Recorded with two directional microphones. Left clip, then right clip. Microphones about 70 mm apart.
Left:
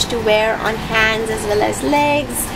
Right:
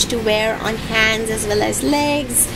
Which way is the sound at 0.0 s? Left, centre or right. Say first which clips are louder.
Left 2 dB; right.